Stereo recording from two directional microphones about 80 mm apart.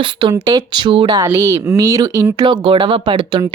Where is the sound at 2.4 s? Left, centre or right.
Right.